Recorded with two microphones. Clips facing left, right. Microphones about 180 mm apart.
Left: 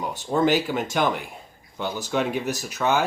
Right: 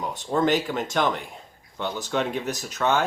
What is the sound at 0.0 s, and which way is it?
Speech, 5° left (ahead or behind).